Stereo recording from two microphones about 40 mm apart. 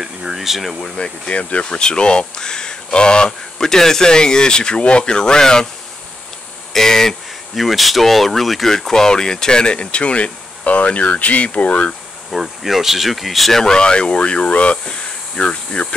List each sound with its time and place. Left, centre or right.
0.0 s speech: centre
0.7 s speech: centre
6.7 s speech: centre
7.5 s speech: centre
8.7 s speech: centre; by 11.9 s left
12.3 s speech: centre
13.6 s speech: centre